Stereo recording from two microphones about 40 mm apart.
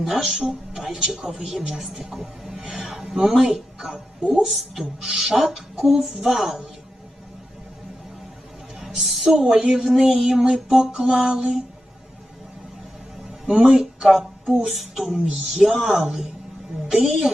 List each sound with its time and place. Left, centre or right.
0.0 s a man's voice: centre
4.4 s a man's voice: centre
8.8 s a sound: centre
9.3 s a man's voice: centre
13.6 s a man's voice: centre
14.0 s a sound: centre
14.7 s a man's voice: centre